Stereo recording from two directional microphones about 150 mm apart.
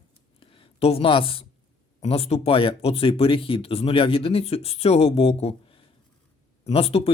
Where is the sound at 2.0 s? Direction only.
40° left (ahead or behind).